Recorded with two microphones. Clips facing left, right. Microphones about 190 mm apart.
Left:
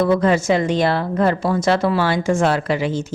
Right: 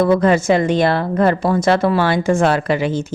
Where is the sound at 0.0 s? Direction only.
55° right (ahead or behind).